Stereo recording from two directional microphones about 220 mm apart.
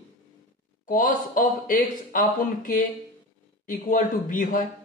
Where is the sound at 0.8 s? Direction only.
35° left (ahead or behind).